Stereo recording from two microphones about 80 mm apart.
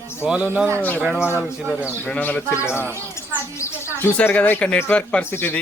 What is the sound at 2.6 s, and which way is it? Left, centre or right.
Speech, left.